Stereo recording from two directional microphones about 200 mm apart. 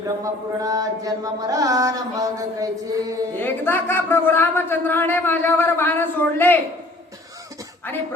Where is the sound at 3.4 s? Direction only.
10° left (ahead or behind).